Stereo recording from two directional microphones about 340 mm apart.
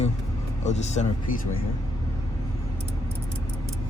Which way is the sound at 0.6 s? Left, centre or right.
Centre.